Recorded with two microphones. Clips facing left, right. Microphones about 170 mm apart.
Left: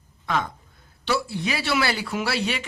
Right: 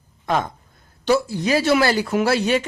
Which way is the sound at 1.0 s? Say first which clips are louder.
Right 7 dB; 45° right (ahead or behind).